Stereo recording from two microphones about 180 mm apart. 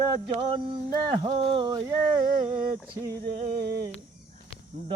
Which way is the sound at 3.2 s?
60° right (ahead or behind).